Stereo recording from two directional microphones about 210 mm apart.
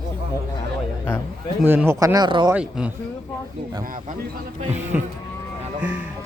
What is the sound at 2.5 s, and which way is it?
Speech, 5° right (ahead or behind).